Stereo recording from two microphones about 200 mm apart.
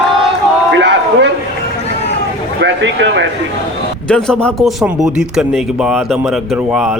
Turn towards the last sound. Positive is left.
turn(degrees=-5)  # may be behind; listen again after turning